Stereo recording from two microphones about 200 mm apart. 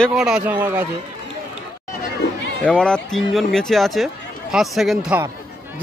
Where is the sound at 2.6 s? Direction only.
5° left (ahead or behind).